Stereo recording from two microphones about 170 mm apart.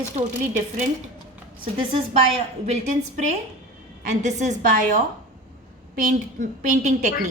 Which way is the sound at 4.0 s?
45° right (ahead or behind).